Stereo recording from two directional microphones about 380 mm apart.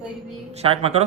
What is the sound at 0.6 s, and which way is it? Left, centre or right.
Speech, centre.